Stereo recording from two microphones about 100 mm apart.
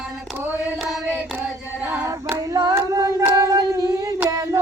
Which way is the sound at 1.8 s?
20° right (ahead or behind).